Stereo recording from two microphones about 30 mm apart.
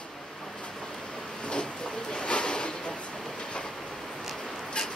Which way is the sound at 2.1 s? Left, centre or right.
Left.